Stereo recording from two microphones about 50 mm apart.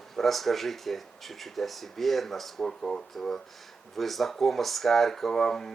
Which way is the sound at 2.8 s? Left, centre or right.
Centre.